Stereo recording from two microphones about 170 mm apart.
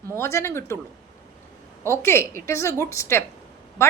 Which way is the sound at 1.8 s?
15° left (ahead or behind).